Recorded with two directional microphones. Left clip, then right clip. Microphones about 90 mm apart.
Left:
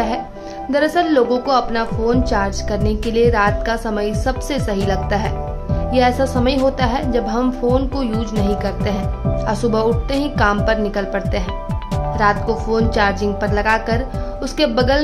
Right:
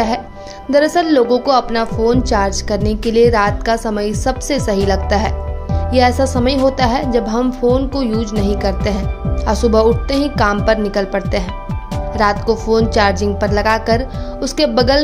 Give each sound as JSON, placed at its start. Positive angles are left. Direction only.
{"t": 0.7, "sound": "a woman's voice", "side_deg": -30}
{"t": 8.5, "sound": "speech", "side_deg": -35}